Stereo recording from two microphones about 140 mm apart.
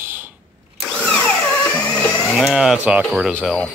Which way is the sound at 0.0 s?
15° right (ahead or behind).